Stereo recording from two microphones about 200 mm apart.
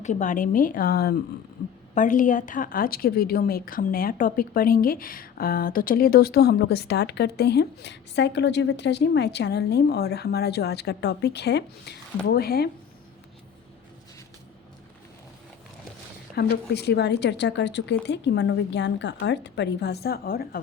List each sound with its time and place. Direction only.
0.0 s a woman's voice: 35° left (ahead or behind)
16.3 s a woman's voice: 55° left (ahead or behind)